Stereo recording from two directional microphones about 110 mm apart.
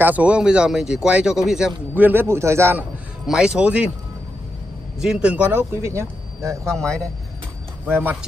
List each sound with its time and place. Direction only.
0.0 s speech: 15° right (ahead or behind)
2.0 s speech: 20° right (ahead or behind)
3.3 s speech: 10° right (ahead or behind)
5.0 s speech: 5° right (ahead or behind); by 7.1 s 30° right (ahead or behind)
7.8 s speech: 15° right (ahead or behind)